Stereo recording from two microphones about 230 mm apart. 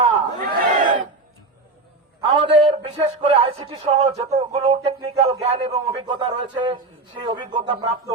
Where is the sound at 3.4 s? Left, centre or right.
Right.